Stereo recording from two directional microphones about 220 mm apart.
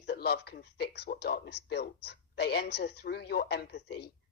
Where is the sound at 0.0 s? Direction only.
45° left (ahead or behind).